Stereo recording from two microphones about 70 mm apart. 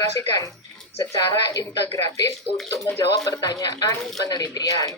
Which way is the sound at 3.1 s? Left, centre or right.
Left.